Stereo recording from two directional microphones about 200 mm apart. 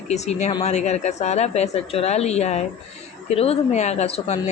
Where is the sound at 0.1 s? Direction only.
35° left (ahead or behind).